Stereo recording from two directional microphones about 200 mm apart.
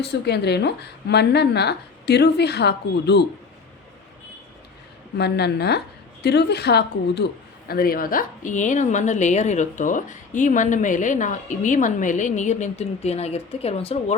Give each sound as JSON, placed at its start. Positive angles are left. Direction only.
{"t": 0.0, "sound": "a woman's voice", "side_deg": 55}
{"t": 5.1, "sound": "a woman's voice", "side_deg": 55}